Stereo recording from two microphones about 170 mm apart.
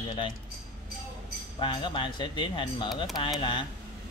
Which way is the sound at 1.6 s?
30° left (ahead or behind).